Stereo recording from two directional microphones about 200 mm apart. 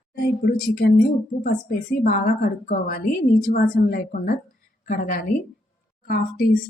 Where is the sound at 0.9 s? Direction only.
45° left (ahead or behind).